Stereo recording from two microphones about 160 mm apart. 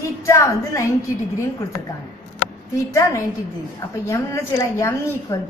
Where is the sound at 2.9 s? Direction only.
20° left (ahead or behind).